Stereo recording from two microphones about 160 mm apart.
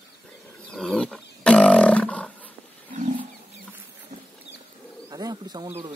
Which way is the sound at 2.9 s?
50° right (ahead or behind).